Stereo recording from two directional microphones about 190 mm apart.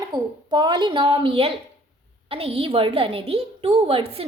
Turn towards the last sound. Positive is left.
turn(degrees=-30)  # may be behind; listen again after turning